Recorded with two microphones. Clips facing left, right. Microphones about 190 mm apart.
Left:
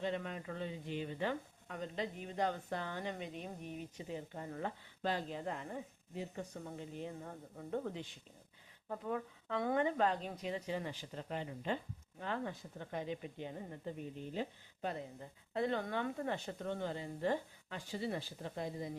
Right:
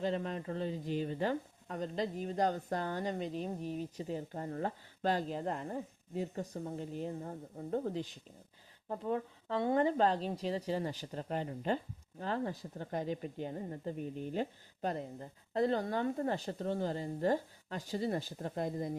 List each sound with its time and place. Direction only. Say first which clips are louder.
0.0 s speech: right 4 dB; 35° right (ahead or behind)